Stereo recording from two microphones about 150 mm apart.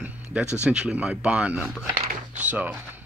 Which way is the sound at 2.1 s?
55° right (ahead or behind).